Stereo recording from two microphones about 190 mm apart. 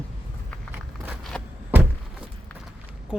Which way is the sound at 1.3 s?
5° left (ahead or behind).